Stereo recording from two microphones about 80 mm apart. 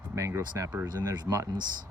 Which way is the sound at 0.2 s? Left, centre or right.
Right.